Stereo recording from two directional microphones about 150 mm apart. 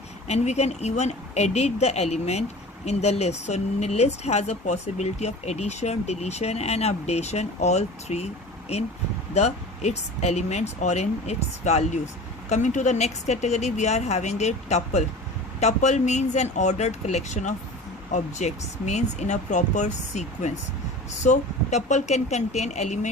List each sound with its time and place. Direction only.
0.3 s speech: 45° left (ahead or behind)
9.3 s speech: 45° left (ahead or behind)